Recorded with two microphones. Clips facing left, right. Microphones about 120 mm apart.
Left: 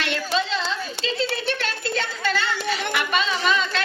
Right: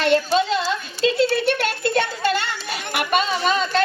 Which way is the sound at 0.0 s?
45° right (ahead or behind).